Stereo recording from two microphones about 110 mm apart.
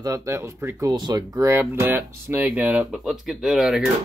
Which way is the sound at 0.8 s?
40° right (ahead or behind).